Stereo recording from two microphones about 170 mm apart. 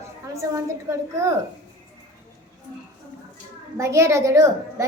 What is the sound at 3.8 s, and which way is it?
A woman's voice, 15° right (ahead or behind).